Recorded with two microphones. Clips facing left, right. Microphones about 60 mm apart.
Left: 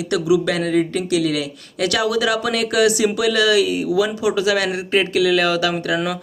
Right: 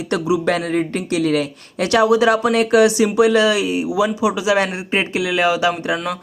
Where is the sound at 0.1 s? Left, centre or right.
Right.